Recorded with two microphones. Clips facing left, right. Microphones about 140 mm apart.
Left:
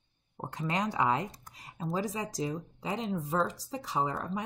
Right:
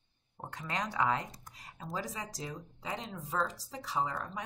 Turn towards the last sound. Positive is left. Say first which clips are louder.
# left 3 dB
turn(degrees=20)  # may be behind; listen again after turning